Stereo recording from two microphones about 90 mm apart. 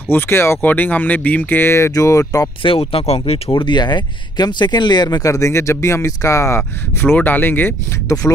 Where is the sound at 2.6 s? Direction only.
90° left.